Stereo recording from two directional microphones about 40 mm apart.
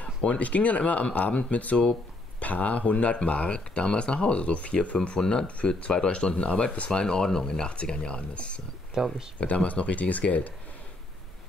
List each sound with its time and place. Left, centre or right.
0.4 s speech: left; by 6.3 s centre
6.3 s speech: left
6.9 s speech: centre
9.0 s speech: centre
9.4 s speech: left